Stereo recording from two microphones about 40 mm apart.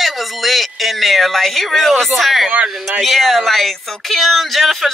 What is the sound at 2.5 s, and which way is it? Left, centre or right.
Speech, right.